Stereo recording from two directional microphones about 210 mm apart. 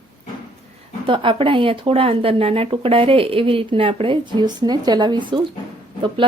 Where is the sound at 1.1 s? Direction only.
25° right (ahead or behind).